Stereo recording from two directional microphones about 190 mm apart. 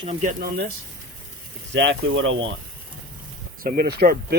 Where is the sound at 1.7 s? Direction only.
70° right (ahead or behind); by 2.5 s 85° right.